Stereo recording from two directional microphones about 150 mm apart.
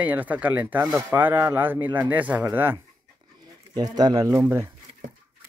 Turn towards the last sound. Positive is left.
turn(degrees=-20)  # may be behind; listen again after turning